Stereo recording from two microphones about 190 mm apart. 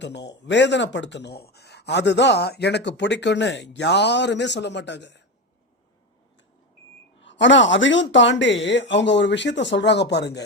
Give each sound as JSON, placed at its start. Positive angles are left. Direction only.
{"t": 0.0, "sound": "speech", "side_deg": 65}
{"t": 7.2, "sound": "speech", "side_deg": 75}